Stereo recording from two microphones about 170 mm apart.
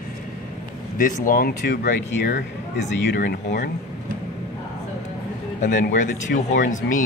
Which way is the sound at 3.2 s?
70° left (ahead or behind).